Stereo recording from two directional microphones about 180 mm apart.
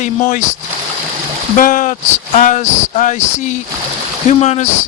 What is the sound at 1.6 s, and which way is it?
Speech, 45° left (ahead or behind).